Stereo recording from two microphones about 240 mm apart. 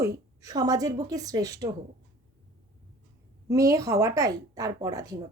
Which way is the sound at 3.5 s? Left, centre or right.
Centre.